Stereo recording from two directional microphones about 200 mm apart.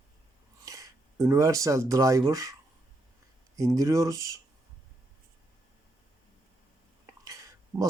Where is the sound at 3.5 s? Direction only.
15° right (ahead or behind).